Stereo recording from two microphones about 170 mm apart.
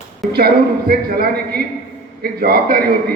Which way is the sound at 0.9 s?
60° right (ahead or behind).